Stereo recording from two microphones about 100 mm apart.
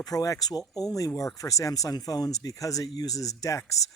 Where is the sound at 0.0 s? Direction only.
40° left (ahead or behind).